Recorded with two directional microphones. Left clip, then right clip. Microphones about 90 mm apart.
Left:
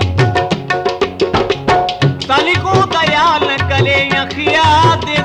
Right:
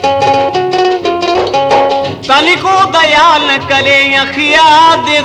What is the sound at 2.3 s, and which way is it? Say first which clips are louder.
Music: right 5 dB; 20° right (ahead or behind).